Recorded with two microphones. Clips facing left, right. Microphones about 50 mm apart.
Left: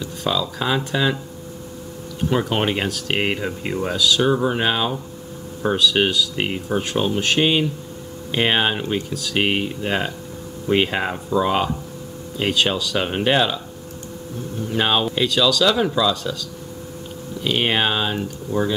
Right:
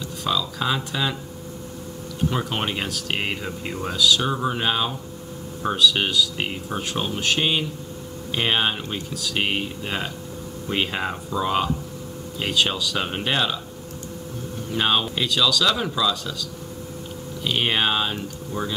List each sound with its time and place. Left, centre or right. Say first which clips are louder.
0.0 s speech: left 2 dB; centre
2.3 s speech: left 10 dB; centre
5.9 s speech: left 3 dB; centre
6.7 s speech: left 6 dB; centre
14.7 s speech: left 2 dB; centre
17.4 s speech: left 3 dB; centre